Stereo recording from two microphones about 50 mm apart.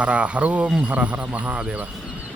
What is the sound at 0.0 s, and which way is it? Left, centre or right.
Speech, right.